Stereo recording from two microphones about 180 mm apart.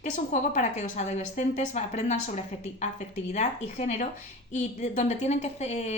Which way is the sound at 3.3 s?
40° left (ahead or behind).